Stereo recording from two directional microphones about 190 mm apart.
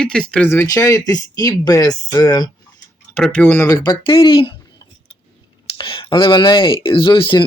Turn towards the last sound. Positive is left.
turn(degrees=25)  # may be behind; listen again after turning